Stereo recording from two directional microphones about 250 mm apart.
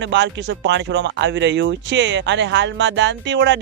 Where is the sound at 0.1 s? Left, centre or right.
Right.